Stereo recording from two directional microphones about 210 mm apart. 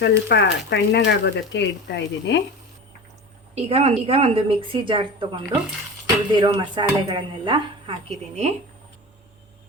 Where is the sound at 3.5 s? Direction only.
30° right (ahead or behind).